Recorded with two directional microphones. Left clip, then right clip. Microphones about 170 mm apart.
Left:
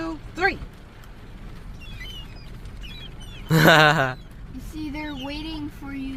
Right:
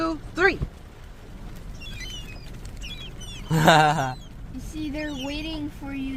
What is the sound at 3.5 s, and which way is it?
Speech, 15° left (ahead or behind).